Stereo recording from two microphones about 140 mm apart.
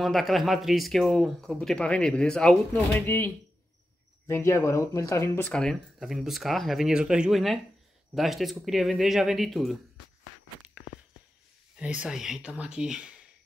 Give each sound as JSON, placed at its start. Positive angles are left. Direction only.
{"t": 0.0, "sound": "speech", "side_deg": 0}
{"t": 5.5, "sound": "speech", "side_deg": 5}
{"t": 11.7, "sound": "speech", "side_deg": -5}